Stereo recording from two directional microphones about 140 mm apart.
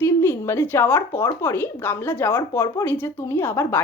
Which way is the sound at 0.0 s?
15° left (ahead or behind).